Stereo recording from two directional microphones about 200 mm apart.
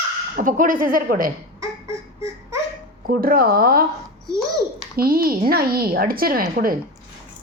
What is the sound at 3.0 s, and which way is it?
Speech, 45° right (ahead or behind).